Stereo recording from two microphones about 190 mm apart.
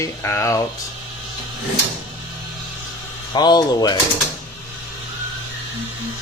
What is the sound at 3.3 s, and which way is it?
Speech, 20° left (ahead or behind).